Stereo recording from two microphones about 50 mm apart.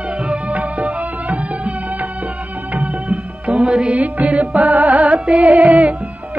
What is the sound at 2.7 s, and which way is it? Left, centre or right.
Music, right.